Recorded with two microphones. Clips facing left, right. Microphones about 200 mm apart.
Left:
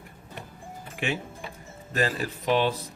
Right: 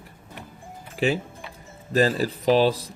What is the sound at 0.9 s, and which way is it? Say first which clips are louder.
Music: right 7 dB; 35° right (ahead or behind).